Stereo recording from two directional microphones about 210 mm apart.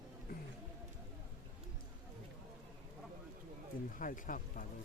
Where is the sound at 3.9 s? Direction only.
40° left (ahead or behind).